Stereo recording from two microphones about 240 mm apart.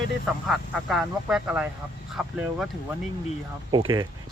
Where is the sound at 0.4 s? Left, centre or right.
Centre.